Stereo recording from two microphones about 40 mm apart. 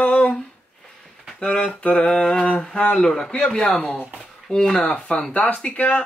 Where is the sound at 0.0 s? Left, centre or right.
Left.